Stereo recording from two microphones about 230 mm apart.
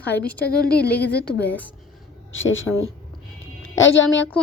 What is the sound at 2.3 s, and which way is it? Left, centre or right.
Speech, left.